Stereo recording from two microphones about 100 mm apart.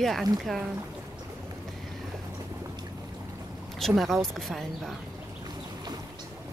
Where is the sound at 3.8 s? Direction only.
Centre (ahead or behind).